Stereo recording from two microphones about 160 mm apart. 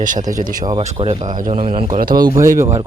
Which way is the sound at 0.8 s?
45° right (ahead or behind).